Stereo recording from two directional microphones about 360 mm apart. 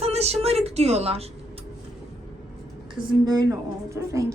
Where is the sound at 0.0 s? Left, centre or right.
Centre.